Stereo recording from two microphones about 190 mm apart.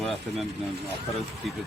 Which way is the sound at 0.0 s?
Centre (ahead or behind).